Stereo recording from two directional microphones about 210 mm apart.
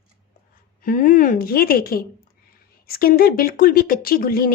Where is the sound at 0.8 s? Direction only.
40° left (ahead or behind).